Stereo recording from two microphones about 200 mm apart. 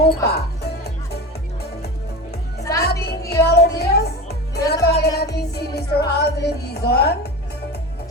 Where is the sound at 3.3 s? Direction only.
50° left (ahead or behind).